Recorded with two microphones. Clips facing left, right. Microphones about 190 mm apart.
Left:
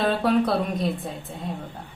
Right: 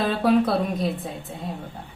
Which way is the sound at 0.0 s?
Centre (ahead or behind).